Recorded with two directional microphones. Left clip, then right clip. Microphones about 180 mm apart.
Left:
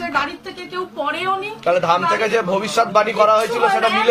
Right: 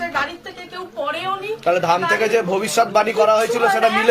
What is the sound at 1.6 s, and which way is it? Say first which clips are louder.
A man's voice: left 1 dB; 40° right (ahead or behind).